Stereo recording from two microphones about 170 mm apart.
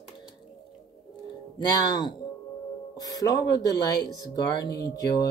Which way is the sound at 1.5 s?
25° left (ahead or behind).